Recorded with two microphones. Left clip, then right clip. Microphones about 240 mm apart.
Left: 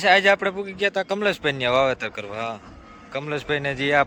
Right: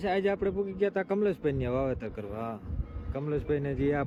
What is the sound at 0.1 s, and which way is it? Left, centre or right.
Speech, left.